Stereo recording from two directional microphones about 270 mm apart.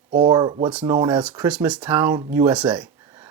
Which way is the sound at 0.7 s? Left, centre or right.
Centre.